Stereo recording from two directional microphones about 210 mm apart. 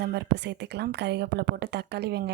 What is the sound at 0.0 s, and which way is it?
A woman's voice, 50° right (ahead or behind).